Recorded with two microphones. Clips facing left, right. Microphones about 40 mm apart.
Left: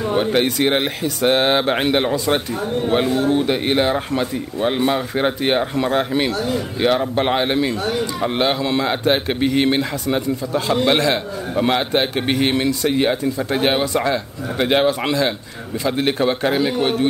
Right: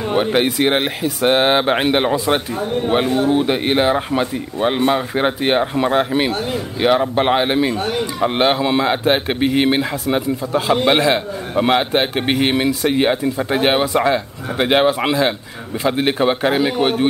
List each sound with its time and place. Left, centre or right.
0.1 s speech: centre